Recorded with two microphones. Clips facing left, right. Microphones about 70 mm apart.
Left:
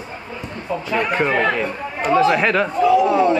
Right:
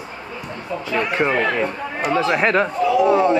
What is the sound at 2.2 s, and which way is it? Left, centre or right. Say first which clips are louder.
A man's voice: left 1 dB; right.